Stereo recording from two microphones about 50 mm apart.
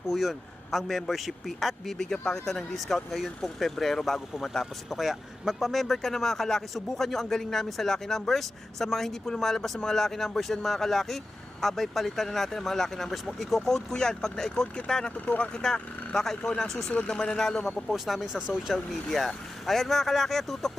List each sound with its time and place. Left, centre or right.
0.1 s speech: centre
15.3 s speech: left
15.6 s speech: centre
16.9 s speech: centre
17.9 s speech: centre
18.3 s speech: centre
19.0 s speech: centre